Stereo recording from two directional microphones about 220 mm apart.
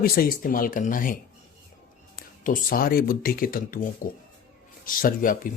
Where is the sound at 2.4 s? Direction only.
40° left (ahead or behind).